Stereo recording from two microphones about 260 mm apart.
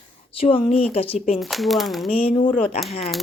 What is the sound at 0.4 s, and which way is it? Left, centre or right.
Speech, left.